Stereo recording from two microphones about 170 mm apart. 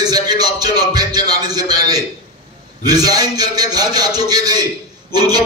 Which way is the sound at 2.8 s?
20° right (ahead or behind).